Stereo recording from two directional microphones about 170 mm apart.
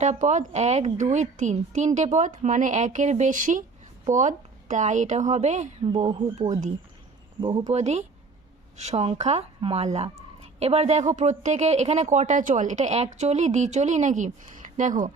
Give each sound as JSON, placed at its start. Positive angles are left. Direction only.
{"t": 0.0, "sound": "speech", "side_deg": -45}
{"t": 5.8, "sound": "a woman's voice", "side_deg": -30}